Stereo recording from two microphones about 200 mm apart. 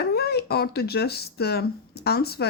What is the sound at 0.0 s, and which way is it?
Speech, 55° left (ahead or behind).